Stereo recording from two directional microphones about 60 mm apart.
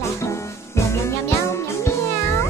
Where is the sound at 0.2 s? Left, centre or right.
Left.